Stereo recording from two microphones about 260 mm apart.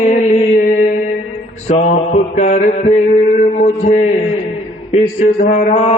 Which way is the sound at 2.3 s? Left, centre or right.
Left.